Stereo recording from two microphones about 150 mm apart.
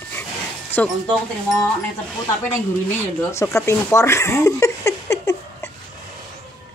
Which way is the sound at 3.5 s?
20° left (ahead or behind).